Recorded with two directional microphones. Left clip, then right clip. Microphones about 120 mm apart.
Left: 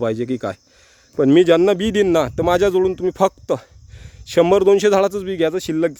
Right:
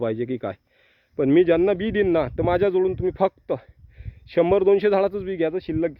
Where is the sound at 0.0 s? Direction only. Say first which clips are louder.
Left 4 dB; 15° left (ahead or behind).